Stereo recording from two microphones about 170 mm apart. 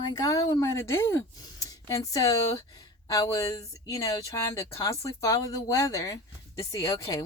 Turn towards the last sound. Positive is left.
turn(degrees=20)  # may be behind; listen again after turning